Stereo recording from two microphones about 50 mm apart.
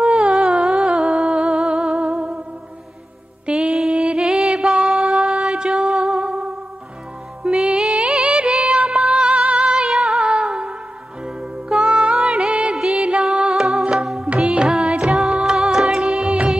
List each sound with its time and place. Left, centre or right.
0.0 s humming: centre
3.4 s music: centre
9.8 s music: centre
12.7 s music: centre